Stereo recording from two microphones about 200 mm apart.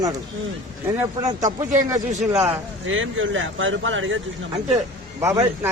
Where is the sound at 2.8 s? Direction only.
75° right (ahead or behind).